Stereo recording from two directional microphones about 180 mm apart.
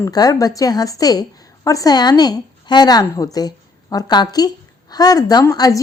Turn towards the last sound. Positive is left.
turn(degrees=20)  # may be behind; listen again after turning